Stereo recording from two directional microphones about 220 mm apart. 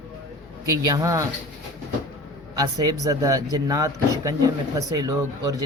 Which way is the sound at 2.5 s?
15° right (ahead or behind).